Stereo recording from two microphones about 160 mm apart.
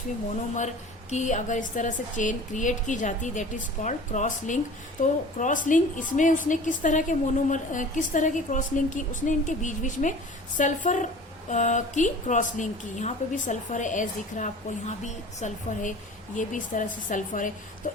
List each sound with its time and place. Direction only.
1.1 s a woman's voice: 50° left (ahead or behind)